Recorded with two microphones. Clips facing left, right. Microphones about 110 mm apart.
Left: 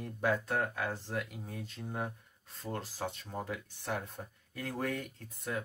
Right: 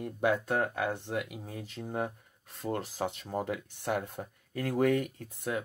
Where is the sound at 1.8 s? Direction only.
20° right (ahead or behind).